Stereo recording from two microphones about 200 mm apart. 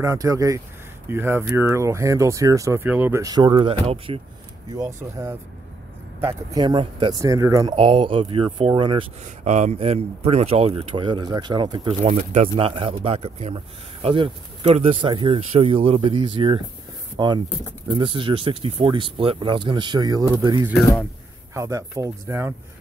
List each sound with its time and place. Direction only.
0.0 s speech: 15° right (ahead or behind)
4.7 s speech: 15° right (ahead or behind)
12.0 s speech: 35° right (ahead or behind); by 22.5 s 15° right (ahead or behind)